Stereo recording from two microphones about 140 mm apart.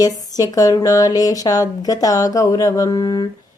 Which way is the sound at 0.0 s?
25° left (ahead or behind).